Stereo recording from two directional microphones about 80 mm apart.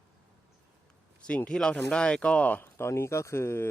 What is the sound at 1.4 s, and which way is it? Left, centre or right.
Speech, centre.